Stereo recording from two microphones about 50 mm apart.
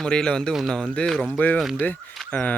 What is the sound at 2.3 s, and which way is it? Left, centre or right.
Speech, left.